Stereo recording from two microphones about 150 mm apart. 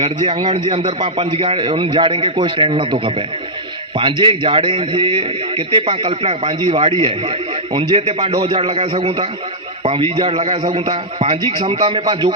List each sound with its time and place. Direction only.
0.0 s a man's voice: 40° right (ahead or behind)